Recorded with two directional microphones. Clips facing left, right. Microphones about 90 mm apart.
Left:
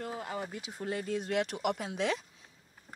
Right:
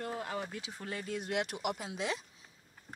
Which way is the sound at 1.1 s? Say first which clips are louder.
Left 2 dB; 35° left (ahead or behind).